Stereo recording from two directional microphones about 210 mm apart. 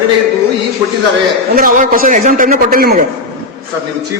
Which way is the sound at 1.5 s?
40° right (ahead or behind).